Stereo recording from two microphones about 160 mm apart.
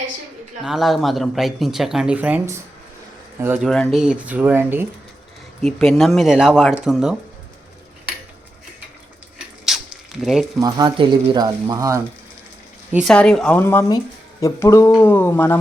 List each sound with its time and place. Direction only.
0.6 s speech: centre (ahead or behind)
3.7 s speech: centre (ahead or behind)
5.8 s speech: centre (ahead or behind)
9.6 s zipper: centre (ahead or behind)
10.6 s speech: 25° right (ahead or behind)
12.9 s a woman's voice: 5° right (ahead or behind)
13.1 s a sound: 5° left (ahead or behind)